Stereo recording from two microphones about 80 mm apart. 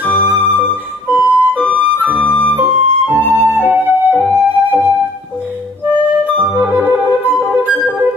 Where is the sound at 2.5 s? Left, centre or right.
Right.